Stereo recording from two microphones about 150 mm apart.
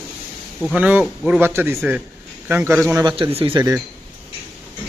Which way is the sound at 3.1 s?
35° right (ahead or behind).